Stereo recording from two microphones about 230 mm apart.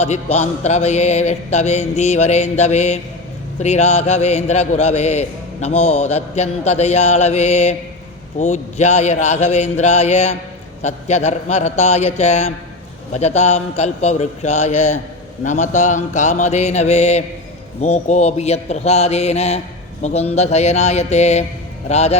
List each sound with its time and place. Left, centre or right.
0.0 s a man's voice: left
15.4 s mantra: left
17.8 s a man's voice: left